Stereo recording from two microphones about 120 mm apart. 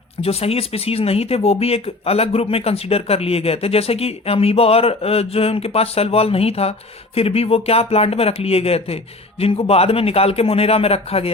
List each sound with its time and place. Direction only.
0.2 s speech: 55° left (ahead or behind)